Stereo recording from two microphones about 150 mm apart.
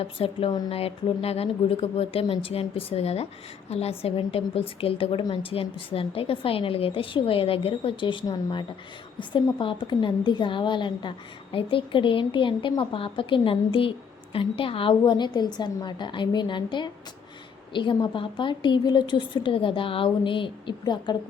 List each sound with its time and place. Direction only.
0.0 s a woman's voice: 40° left (ahead or behind)